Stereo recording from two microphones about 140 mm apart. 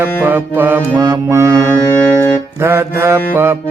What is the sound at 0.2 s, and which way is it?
Mantra, 15° right (ahead or behind).